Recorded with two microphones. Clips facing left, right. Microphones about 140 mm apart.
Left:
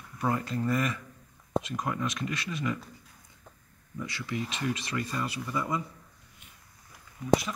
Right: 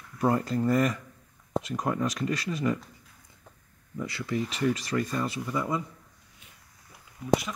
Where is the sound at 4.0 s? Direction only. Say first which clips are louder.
Right 4 dB; 30° right (ahead or behind).